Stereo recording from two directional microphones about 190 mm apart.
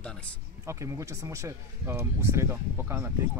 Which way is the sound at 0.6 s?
15° right (ahead or behind).